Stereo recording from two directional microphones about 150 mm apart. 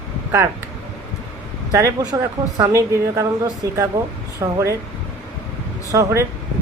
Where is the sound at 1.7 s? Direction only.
25° right (ahead or behind).